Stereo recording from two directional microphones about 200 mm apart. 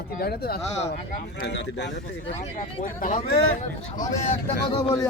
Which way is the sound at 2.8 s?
35° left (ahead or behind).